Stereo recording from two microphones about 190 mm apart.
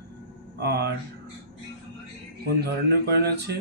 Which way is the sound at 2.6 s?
60° right (ahead or behind).